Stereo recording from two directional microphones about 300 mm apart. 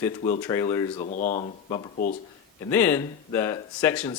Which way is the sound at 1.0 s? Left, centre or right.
Left.